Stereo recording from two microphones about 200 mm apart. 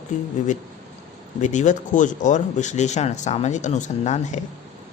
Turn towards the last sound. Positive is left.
turn(degrees=35)  # may be behind; listen again after turning